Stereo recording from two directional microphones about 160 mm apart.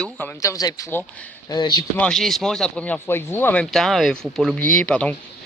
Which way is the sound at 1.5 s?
30° left (ahead or behind).